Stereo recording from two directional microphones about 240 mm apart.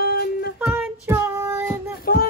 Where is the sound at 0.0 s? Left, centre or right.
Left.